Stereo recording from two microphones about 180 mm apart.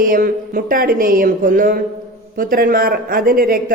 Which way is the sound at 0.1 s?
50° right (ahead or behind).